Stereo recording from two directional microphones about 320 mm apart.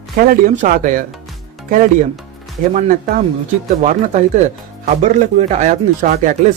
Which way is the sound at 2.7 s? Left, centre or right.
Right.